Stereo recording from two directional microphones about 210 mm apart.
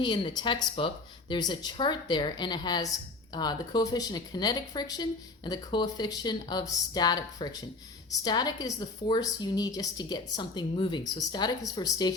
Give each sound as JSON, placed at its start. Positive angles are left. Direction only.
{"t": 0.0, "sound": "a woman's voice", "side_deg": 20}